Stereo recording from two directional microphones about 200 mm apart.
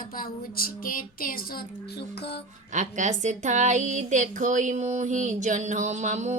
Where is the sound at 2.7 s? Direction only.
35° right (ahead or behind).